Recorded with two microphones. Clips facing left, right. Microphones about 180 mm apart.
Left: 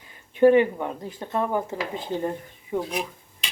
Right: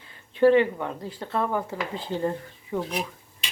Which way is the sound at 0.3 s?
15° left (ahead or behind).